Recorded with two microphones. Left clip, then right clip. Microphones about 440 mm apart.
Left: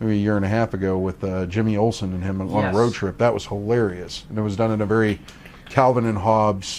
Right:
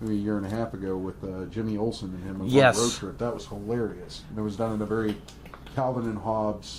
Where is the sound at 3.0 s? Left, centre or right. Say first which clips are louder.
Left 10 dB; left.